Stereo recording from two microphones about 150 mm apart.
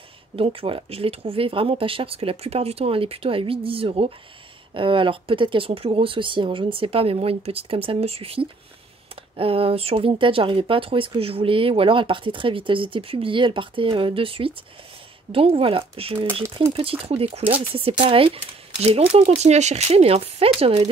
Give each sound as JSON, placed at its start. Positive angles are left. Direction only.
{"t": 0.4, "sound": "speech", "side_deg": -35}